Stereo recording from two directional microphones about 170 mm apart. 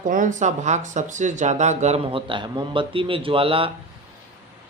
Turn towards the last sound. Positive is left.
turn(degrees=-30)  # may be behind; listen again after turning